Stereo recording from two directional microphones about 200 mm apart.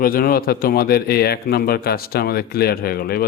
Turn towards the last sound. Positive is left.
turn(degrees=50)  # may be behind; listen again after turning